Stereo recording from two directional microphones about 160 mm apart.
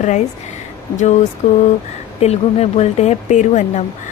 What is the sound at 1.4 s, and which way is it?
Speech, 50° left (ahead or behind).